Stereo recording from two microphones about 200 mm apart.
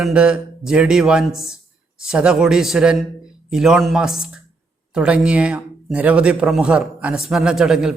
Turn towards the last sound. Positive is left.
turn(degrees=-5)  # may be behind; listen again after turning